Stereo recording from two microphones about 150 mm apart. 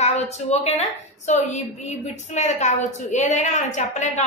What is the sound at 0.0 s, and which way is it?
A woman's voice, 45° left (ahead or behind).